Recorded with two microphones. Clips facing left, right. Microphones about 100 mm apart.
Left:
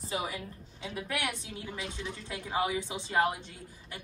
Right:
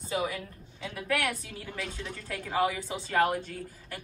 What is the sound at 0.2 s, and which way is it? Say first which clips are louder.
A woman's voice: right 4 dB; 25° left (ahead or behind).